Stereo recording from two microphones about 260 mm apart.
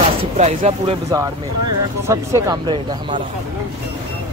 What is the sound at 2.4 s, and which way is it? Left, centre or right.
Speech, centre.